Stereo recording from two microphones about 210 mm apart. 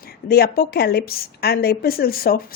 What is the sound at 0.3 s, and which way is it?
A woman's voice, 45° left (ahead or behind).